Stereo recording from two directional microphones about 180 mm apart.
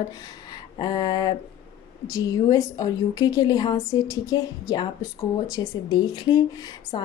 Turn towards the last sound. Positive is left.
turn(degrees=25)  # may be behind; listen again after turning